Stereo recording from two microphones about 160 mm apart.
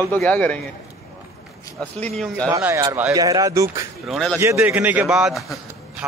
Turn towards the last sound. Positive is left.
turn(degrees=0)  # may be behind; listen again after turning